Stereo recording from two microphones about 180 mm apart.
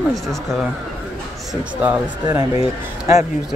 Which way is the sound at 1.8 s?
10° right (ahead or behind).